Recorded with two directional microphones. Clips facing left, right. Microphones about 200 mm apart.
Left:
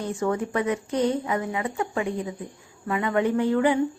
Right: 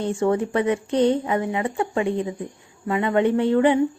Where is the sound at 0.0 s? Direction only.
30° right (ahead or behind).